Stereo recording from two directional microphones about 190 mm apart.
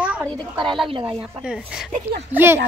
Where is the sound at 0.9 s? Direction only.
25° right (ahead or behind).